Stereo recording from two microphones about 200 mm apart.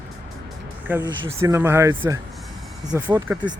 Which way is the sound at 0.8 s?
10° right (ahead or behind).